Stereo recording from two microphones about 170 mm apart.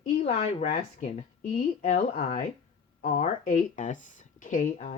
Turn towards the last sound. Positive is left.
turn(degrees=45)  # may be behind; listen again after turning